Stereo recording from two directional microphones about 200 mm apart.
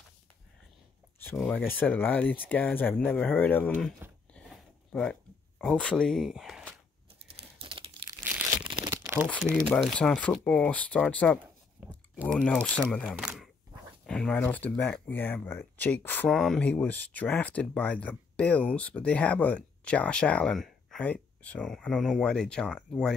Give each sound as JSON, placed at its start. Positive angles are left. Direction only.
{"t": 1.2, "sound": "speech", "side_deg": 5}
{"t": 4.3, "sound": "a sound", "side_deg": 5}
{"t": 5.6, "sound": "speech", "side_deg": 5}
{"t": 7.3, "sound": "typing", "side_deg": -25}
{"t": 8.6, "sound": "crumpling", "side_deg": -25}
{"t": 8.9, "sound": "a sound", "side_deg": -10}
{"t": 9.5, "sound": "speech", "side_deg": -5}
{"t": 9.9, "sound": "speech", "side_deg": 5}